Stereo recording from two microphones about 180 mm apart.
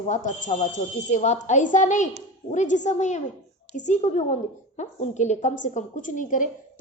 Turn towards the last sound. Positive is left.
turn(degrees=45)  # may be behind; listen again after turning